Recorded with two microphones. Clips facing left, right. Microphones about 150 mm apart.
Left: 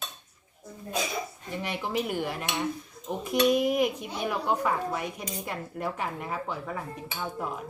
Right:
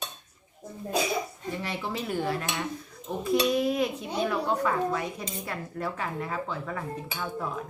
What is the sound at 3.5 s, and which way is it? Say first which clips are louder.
A woman's voice: left 2 dB; 15° left (ahead or behind).